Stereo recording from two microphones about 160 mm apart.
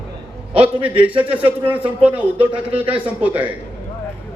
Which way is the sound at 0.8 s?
10° right (ahead or behind).